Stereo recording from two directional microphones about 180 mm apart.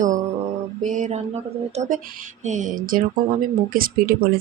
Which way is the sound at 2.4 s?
45° right (ahead or behind).